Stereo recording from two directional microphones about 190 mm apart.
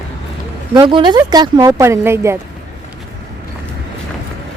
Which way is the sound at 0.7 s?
25° right (ahead or behind).